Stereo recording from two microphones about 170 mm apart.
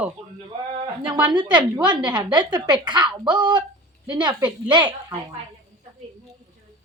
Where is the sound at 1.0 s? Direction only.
25° right (ahead or behind).